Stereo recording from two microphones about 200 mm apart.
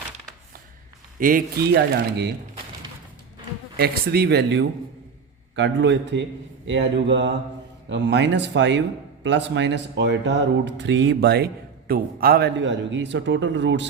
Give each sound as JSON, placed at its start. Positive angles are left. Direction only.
{"t": 1.2, "sound": "speech", "side_deg": -45}
{"t": 1.7, "sound": "speech", "side_deg": -55}
{"t": 3.8, "sound": "speech", "side_deg": -50}